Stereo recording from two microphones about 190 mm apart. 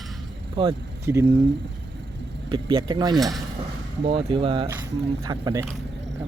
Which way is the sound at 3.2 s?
Centre (ahead or behind).